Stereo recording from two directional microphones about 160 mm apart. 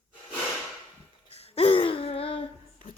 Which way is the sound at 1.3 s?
40° left (ahead or behind).